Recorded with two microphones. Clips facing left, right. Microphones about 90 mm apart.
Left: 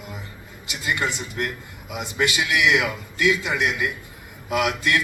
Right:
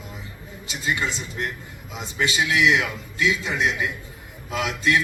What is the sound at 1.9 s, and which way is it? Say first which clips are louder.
A man's voice: left 2 dB; 70° left (ahead or behind).